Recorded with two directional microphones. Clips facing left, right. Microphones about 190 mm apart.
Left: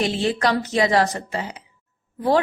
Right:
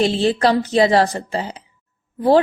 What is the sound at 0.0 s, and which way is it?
A woman's voice, 30° right (ahead or behind).